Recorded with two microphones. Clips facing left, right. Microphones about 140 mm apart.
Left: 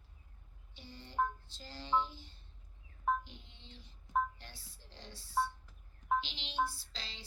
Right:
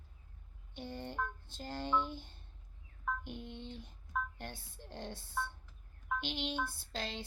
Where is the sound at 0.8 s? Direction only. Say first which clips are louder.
Left 3 dB; 55° right (ahead or behind).